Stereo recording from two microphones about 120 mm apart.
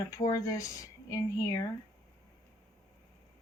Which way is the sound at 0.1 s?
30° left (ahead or behind).